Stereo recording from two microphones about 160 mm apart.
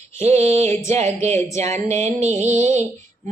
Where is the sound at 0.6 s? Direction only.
15° left (ahead or behind).